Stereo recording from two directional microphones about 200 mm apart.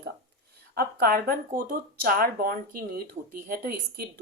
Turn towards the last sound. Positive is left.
turn(degrees=-50)  # may be behind; listen again after turning